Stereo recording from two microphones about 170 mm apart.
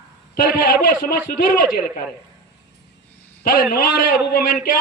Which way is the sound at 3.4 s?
55° left (ahead or behind).